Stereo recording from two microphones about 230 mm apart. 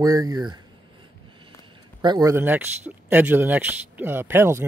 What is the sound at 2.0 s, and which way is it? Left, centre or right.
Speech, centre.